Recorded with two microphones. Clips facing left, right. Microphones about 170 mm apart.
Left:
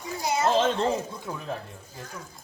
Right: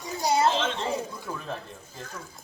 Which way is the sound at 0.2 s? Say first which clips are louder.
Right 3 dB; 30° right (ahead or behind).